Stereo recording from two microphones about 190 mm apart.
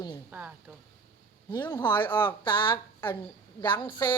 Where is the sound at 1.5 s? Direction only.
20° left (ahead or behind).